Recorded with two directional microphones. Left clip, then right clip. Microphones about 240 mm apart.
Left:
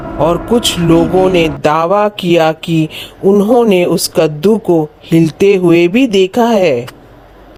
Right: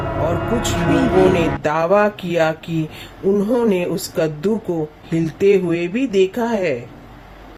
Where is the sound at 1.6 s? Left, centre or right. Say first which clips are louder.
Left 4 dB; left.